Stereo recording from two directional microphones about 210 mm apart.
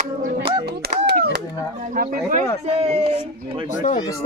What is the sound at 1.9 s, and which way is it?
Speech, 45° right (ahead or behind).